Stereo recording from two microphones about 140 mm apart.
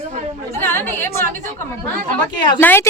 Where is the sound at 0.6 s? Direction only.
15° left (ahead or behind).